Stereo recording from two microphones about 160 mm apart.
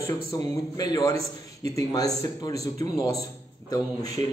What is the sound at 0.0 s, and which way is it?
Speech, 20° left (ahead or behind).